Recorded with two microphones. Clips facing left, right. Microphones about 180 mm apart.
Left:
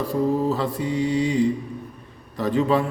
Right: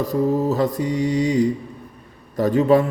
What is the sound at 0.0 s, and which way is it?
A man's voice, 45° right (ahead or behind).